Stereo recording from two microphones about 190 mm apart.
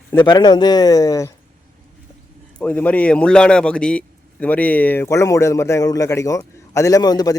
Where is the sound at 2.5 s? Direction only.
10° left (ahead or behind).